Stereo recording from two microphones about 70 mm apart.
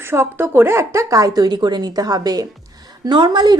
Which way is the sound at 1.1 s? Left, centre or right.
Right.